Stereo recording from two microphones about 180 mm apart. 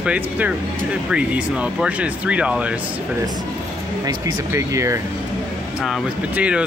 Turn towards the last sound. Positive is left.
turn(degrees=-5)  # may be behind; listen again after turning